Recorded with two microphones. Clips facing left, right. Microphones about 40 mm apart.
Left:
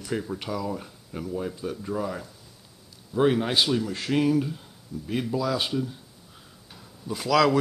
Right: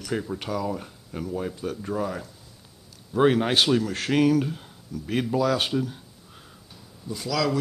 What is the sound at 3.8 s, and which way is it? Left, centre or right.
Speech, right.